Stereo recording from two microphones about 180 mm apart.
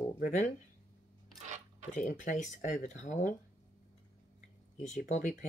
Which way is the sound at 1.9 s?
40° left (ahead or behind).